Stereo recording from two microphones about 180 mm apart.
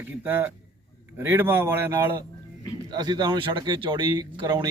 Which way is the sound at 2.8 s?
25° right (ahead or behind).